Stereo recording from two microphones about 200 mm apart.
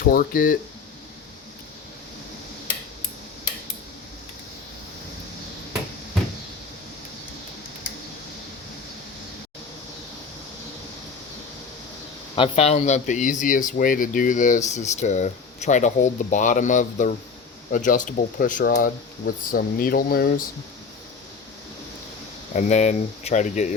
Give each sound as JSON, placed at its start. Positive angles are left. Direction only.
{"t": 0.0, "sound": "speech", "side_deg": 45}
{"t": 12.4, "sound": "speech", "side_deg": 30}
{"t": 22.5, "sound": "speech", "side_deg": 35}